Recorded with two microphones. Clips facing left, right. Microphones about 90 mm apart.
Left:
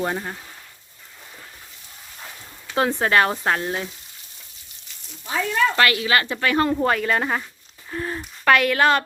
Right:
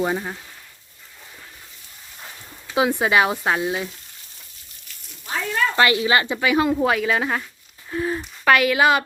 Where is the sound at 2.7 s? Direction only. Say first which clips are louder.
Right 1 dB; 10° right (ahead or behind).